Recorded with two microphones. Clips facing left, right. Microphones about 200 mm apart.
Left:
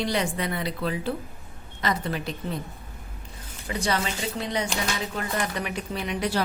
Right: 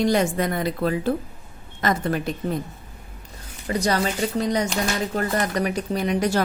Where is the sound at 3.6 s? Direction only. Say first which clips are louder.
Right 5 dB; 40° right (ahead or behind).